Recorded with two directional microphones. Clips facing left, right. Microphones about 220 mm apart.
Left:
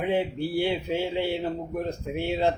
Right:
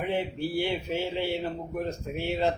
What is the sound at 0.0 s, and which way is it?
A man's voice, 15° left (ahead or behind).